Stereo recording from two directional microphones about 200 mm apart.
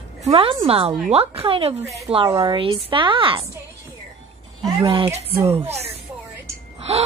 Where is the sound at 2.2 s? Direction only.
15° right (ahead or behind).